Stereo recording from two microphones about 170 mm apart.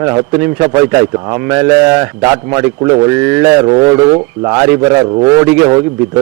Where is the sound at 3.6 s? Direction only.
25° right (ahead or behind).